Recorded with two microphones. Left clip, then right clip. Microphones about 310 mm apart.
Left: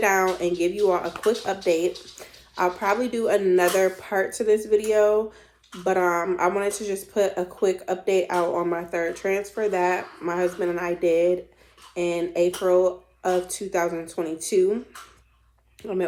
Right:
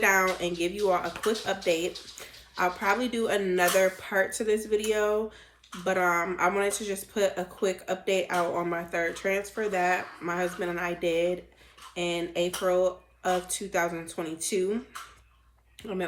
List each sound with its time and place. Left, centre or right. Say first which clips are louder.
0.0 s speech: left 3 dB; centre
15.8 s speech: left 7 dB; left